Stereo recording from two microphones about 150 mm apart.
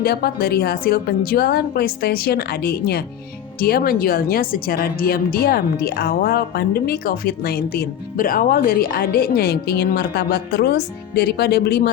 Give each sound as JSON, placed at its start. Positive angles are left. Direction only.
{"t": 0.0, "sound": "a woman's voice", "side_deg": 90}